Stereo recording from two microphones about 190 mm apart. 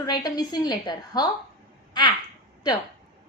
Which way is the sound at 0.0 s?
20° left (ahead or behind).